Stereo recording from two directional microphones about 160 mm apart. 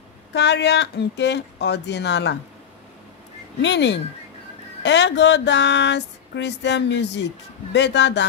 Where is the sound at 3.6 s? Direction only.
90° left.